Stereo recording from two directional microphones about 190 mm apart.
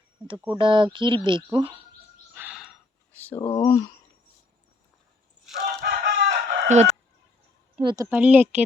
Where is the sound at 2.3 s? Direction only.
5° right (ahead or behind).